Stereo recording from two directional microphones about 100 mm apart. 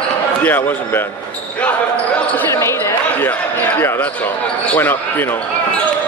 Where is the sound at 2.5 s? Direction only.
25° left (ahead or behind).